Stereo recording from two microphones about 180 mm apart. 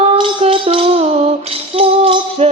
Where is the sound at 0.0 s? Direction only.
30° right (ahead or behind).